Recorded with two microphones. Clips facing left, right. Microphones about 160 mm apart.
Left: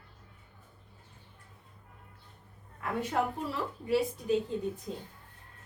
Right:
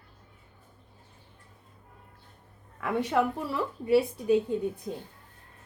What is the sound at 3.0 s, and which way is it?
Speech, 70° right (ahead or behind).